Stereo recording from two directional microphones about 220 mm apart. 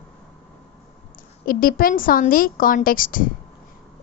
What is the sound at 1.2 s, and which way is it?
A woman's voice, 40° left (ahead or behind).